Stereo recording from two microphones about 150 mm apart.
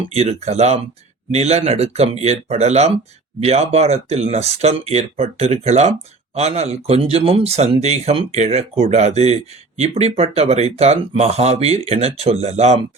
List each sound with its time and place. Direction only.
0.1 s speech: 45° right (ahead or behind)